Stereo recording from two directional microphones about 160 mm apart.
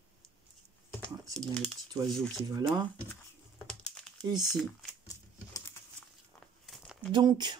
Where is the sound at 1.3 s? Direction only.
Centre (ahead or behind).